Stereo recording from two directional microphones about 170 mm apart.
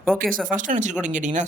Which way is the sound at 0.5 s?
50° right (ahead or behind).